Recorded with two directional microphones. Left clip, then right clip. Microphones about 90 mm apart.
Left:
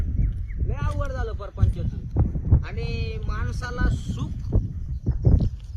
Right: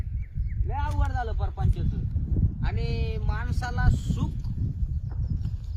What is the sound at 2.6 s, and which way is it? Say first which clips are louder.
Speech: left 1 dB; 40° right (ahead or behind).